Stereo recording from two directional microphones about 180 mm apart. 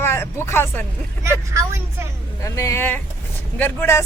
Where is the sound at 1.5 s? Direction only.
15° right (ahead or behind).